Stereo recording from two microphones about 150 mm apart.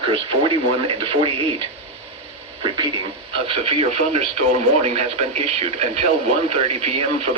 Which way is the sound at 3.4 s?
40° right (ahead or behind).